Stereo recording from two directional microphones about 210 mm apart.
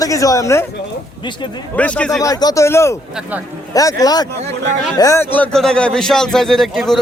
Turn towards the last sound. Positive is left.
turn(degrees=0)  # may be behind; listen again after turning